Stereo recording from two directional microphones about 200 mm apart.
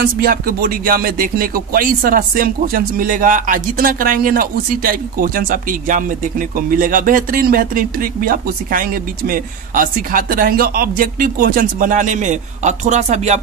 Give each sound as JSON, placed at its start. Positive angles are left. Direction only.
{"t": 0.0, "sound": "speech", "side_deg": -45}